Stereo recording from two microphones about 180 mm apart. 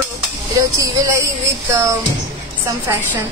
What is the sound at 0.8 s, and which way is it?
Speech, 15° right (ahead or behind).